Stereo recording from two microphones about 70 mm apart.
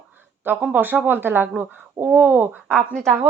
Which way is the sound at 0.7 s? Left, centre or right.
Right.